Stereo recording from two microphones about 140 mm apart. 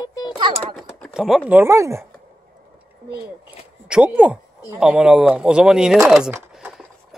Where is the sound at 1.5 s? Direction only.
20° right (ahead or behind).